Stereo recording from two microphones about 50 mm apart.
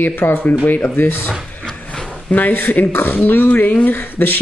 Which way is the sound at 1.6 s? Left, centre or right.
Centre.